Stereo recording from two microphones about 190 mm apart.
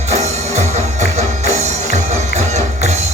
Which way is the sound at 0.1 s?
35° right (ahead or behind).